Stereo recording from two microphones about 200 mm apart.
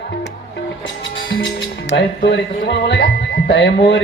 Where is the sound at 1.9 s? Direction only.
55° left (ahead or behind).